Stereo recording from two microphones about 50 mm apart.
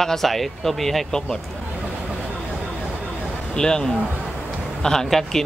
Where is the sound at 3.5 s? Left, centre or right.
Centre.